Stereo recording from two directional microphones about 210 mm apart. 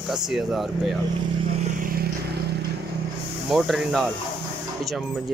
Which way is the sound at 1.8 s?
45° right (ahead or behind).